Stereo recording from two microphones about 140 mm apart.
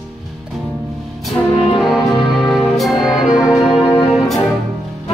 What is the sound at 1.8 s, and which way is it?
Music, centre (ahead or behind).